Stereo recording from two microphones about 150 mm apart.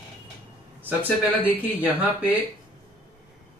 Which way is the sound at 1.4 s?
10° right (ahead or behind).